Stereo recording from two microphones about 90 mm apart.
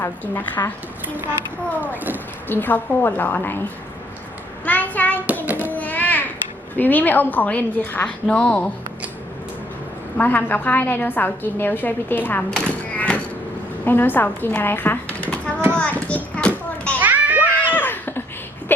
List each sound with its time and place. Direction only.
0.0 s a woman's voice: 20° left (ahead or behind)
1.0 s speech: 20° right (ahead or behind)
2.5 s a woman's voice: 20° left (ahead or behind)
4.6 s a child's voice: 20° left (ahead or behind)
5.5 s music: 20° right (ahead or behind)
5.7 s music: 20° left (ahead or behind)
6.7 s a woman's voice: 20° left (ahead or behind)
10.2 s a woman's voice: 20° left (ahead or behind)
12.5 s a sound: 10° left (ahead or behind)
13.8 s a child's voice: 20° left (ahead or behind)
15.8 s children playing: 15° left (ahead or behind)
17.0 s a sound: 20° right (ahead or behind)
17.6 s a sound: 20° left (ahead or behind)